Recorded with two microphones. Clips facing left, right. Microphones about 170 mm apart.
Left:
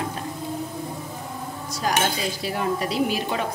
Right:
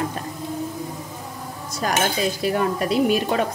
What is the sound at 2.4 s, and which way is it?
Speech, 50° right (ahead or behind).